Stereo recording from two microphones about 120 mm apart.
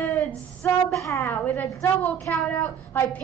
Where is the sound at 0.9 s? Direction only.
25° left (ahead or behind).